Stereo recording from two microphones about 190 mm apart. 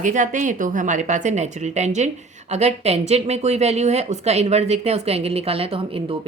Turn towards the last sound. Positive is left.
turn(degrees=-30)  # may be behind; listen again after turning